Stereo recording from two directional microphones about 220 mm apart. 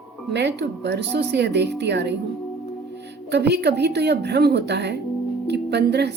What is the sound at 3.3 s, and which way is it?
Speech, 50° right (ahead or behind).